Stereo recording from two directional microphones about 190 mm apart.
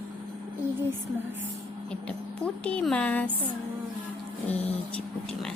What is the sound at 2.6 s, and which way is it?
Speech, 5° left (ahead or behind).